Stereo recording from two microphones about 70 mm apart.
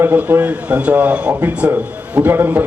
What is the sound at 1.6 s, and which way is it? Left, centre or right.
A man's voice, right.